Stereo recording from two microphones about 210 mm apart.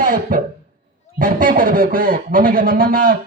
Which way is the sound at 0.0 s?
40° right (ahead or behind).